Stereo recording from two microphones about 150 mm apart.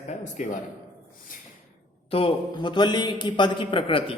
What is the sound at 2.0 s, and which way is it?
A man's voice, 40° left (ahead or behind).